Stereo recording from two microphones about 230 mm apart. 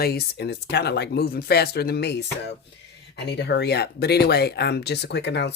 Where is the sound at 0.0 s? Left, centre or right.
Left.